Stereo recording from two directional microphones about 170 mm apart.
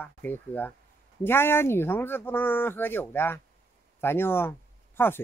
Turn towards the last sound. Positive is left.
turn(degrees=15)  # may be behind; listen again after turning